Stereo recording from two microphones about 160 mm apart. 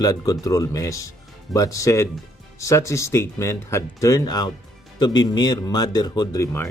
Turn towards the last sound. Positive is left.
turn(degrees=15)  # may be behind; listen again after turning